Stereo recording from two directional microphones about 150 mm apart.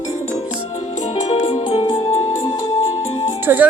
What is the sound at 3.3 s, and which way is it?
Music, 15° right (ahead or behind).